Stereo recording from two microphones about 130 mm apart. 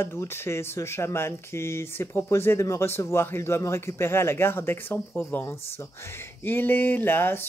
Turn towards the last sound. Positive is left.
turn(degrees=15)  # may be behind; listen again after turning